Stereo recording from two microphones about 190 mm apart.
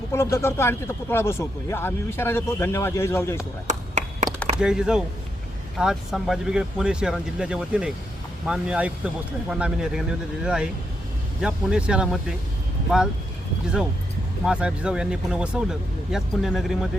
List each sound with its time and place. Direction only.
0.1 s speech: 15° left (ahead or behind)
3.7 s a sound: 40° right (ahead or behind)
4.5 s speech: 5° right (ahead or behind)
14.4 s speech: 5° right (ahead or behind)